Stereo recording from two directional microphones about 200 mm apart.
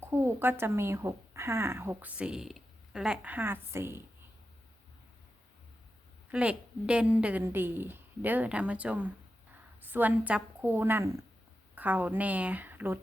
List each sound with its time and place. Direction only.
0.0 s speech: 10° right (ahead or behind)
6.3 s a woman's voice: 5° right (ahead or behind)